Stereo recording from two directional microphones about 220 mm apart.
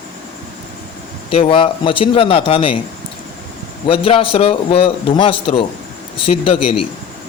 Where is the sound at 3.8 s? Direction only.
25° left (ahead or behind).